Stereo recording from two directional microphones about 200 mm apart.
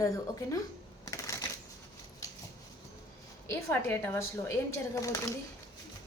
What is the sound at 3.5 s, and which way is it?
A woman's voice, 10° left (ahead or behind).